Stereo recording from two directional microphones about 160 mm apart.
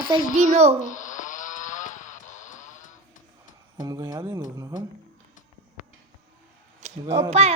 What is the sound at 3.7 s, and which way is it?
Speech, 25° right (ahead or behind).